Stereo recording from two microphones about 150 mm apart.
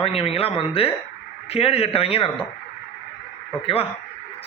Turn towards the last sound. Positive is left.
turn(degrees=40)  # may be behind; listen again after turning